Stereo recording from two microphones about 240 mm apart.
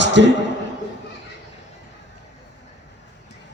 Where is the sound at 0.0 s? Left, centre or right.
Right.